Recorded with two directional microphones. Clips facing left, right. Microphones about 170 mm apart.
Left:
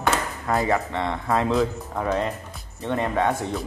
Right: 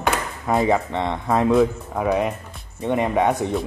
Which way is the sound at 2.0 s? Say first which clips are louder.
Right 4 dB; 10° right (ahead or behind).